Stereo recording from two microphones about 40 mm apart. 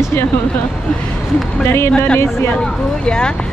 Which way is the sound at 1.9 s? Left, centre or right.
Left.